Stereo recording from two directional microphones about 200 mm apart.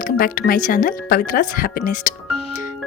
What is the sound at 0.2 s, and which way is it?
Speech, 45° left (ahead or behind).